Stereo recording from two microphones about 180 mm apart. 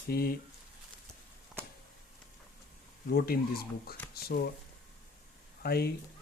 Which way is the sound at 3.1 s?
55° left (ahead or behind).